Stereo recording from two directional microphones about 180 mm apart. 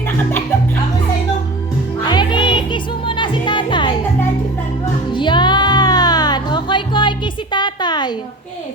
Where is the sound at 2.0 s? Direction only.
25° left (ahead or behind).